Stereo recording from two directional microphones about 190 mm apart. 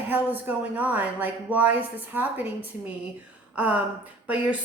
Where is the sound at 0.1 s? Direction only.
10° right (ahead or behind).